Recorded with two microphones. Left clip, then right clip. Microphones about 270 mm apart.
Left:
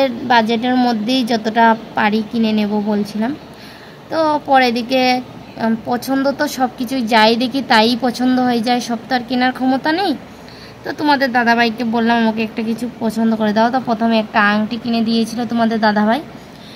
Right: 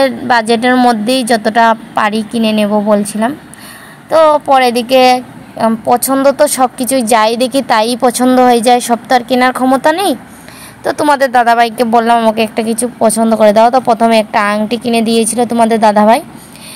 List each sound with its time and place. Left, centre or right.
0.0 s a woman's voice: right